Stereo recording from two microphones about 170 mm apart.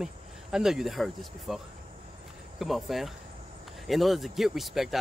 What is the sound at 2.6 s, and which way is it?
Speech, centre (ahead or behind).